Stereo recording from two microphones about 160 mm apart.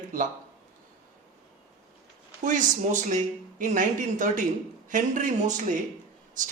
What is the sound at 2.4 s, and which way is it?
Speech, 50° right (ahead or behind).